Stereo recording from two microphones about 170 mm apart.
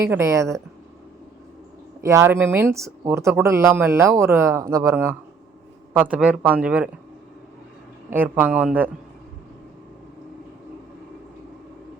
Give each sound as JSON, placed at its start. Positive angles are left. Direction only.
{"t": 0.0, "sound": "speech", "side_deg": -15}
{"t": 2.0, "sound": "speech", "side_deg": -15}
{"t": 8.1, "sound": "speech", "side_deg": -10}